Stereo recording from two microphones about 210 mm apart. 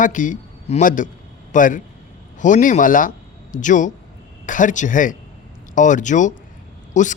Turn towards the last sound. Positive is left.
turn(degrees=35)  # may be behind; listen again after turning